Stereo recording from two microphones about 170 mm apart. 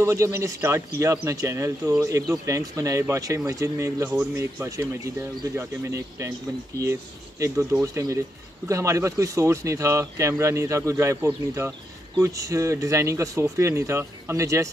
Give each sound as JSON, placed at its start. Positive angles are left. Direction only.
{"t": 0.0, "sound": "speech", "side_deg": -15}